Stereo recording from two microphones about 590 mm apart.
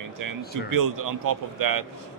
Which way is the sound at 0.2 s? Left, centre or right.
Right.